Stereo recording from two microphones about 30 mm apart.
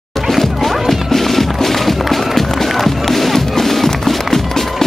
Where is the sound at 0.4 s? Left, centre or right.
Centre.